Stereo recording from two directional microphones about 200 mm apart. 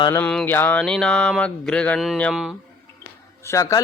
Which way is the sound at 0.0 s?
15° left (ahead or behind).